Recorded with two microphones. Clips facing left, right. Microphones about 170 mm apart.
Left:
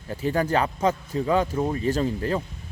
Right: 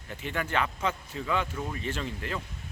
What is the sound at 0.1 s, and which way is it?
Speech, 35° left (ahead or behind).